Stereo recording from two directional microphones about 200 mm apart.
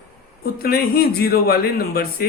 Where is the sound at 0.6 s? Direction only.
50° left (ahead or behind).